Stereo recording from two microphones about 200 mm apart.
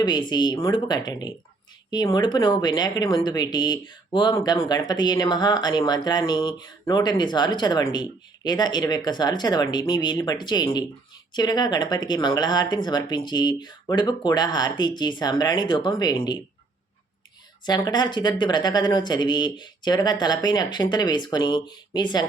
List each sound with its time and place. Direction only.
0.0 s speech: 20° left (ahead or behind)
17.7 s speech: 20° left (ahead or behind)